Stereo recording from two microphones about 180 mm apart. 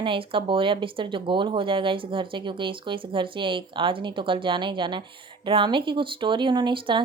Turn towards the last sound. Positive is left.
turn(degrees=-25)  # may be behind; listen again after turning